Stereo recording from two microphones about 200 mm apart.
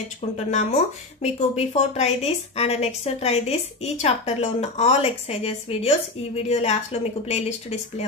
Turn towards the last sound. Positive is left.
turn(degrees=35)  # may be behind; listen again after turning